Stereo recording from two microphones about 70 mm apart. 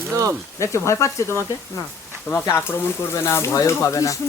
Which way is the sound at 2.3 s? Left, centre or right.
Left.